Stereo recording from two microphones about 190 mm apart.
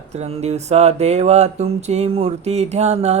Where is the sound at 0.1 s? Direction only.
35° right (ahead or behind).